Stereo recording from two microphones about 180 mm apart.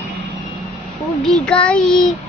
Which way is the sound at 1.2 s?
5° left (ahead or behind).